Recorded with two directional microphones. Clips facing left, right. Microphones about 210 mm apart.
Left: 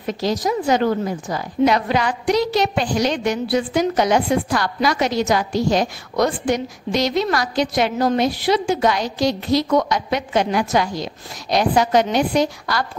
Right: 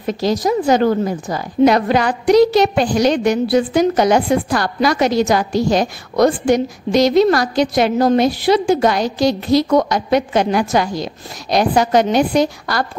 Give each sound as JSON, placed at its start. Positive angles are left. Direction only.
{"t": 0.0, "sound": "a woman's voice", "side_deg": -40}